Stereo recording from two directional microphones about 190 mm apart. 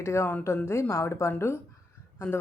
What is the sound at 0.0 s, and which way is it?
Speech, 15° left (ahead or behind).